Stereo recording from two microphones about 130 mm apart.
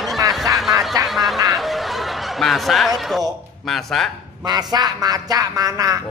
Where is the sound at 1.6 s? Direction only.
Centre (ahead or behind).